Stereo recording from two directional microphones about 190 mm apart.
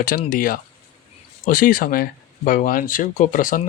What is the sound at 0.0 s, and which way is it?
Speech, 50° left (ahead or behind).